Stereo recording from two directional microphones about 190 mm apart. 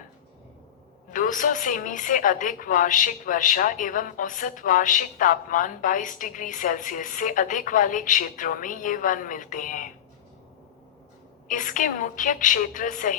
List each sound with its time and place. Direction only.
1.1 s a woman's voice: 45° left (ahead or behind)
11.4 s a woman's voice: 45° left (ahead or behind)